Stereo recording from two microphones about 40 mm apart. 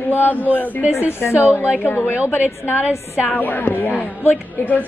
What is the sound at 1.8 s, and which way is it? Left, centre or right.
Speech, left.